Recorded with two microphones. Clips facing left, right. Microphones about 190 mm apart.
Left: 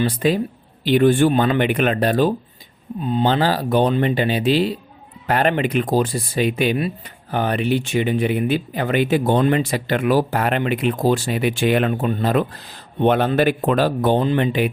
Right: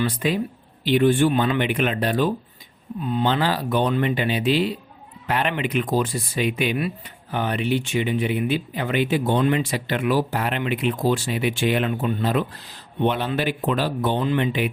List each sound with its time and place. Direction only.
0.1 s speech: 35° left (ahead or behind)
3.0 s speech: 30° left (ahead or behind)